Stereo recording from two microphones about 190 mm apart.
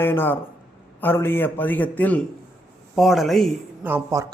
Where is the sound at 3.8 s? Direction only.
15° right (ahead or behind).